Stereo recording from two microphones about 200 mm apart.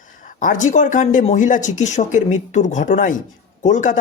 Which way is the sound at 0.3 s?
40° left (ahead or behind).